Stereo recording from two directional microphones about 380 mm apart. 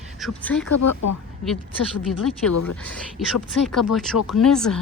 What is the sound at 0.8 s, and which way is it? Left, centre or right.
Speech, left.